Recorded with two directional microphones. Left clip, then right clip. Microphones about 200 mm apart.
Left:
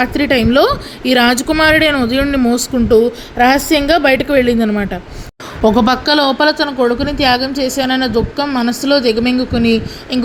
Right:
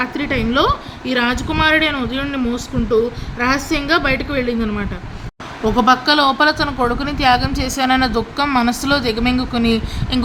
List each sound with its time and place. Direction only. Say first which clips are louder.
0.0 s a woman's voice: left 7 dB; 20° left (ahead or behind)
6.1 s a woman's voice: left 2 dB; 10° left (ahead or behind)